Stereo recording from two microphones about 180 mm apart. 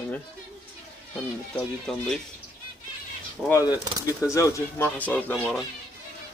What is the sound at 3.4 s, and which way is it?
Speech, 5° left (ahead or behind).